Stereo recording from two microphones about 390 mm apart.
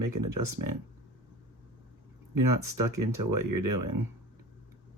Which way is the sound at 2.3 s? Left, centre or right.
Right.